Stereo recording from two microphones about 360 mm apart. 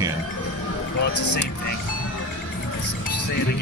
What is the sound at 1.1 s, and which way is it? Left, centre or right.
Speech, left.